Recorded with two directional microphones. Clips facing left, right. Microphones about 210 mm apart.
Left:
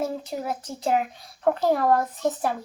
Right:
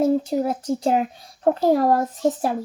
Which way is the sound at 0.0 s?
35° right (ahead or behind).